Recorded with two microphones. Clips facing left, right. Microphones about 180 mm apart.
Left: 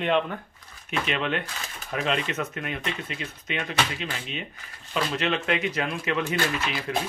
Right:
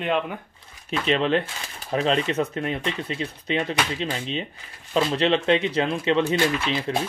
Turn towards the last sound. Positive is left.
turn(degrees=-25)  # may be behind; listen again after turning